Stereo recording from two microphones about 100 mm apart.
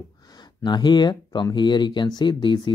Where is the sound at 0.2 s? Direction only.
45° left (ahead or behind).